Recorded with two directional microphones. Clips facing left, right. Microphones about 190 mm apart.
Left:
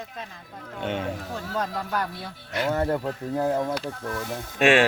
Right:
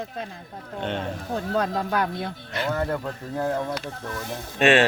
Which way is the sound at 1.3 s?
60° right (ahead or behind).